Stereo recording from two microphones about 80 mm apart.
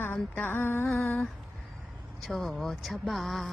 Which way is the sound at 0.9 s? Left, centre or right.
Left.